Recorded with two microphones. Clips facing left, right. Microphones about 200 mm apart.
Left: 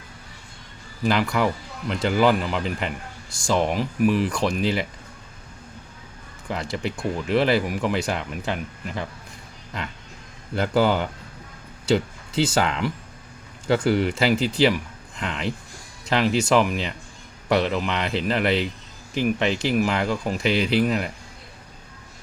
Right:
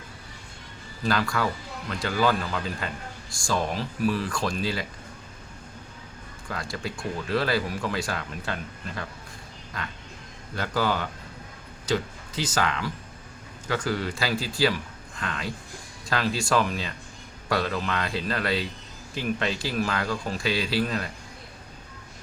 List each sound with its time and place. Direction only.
1.0 s speech: 15° left (ahead or behind)
6.5 s speech: 20° left (ahead or behind)
10.5 s speech: 25° left (ahead or behind)